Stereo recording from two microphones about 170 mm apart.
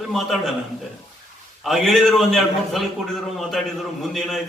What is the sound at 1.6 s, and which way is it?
A man's voice, centre (ahead or behind).